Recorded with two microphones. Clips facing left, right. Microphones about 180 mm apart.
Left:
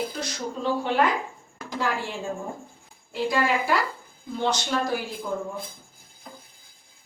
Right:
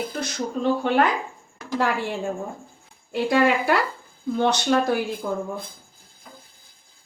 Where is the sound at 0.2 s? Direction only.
55° right (ahead or behind).